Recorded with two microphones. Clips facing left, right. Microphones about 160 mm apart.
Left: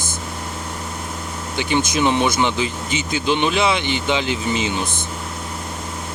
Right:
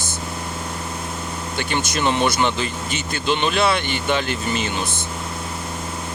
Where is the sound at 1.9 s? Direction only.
15° left (ahead or behind).